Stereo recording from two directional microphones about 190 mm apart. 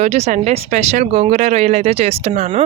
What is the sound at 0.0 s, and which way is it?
A woman's voice, 35° right (ahead or behind).